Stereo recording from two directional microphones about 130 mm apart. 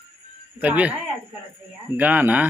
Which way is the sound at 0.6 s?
10° right (ahead or behind).